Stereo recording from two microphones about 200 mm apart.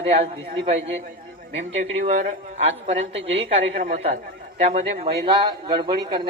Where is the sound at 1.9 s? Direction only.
35° right (ahead or behind).